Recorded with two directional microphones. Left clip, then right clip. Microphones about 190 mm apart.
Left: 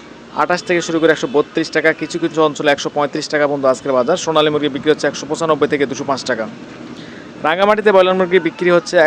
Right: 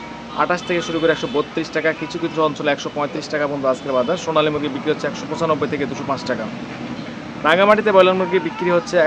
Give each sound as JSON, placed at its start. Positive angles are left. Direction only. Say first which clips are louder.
{"t": 0.3, "sound": "speech", "louder": "left 4 dB", "side_deg": 40}
{"t": 7.4, "sound": "speech", "louder": "left 1 dB", "side_deg": 40}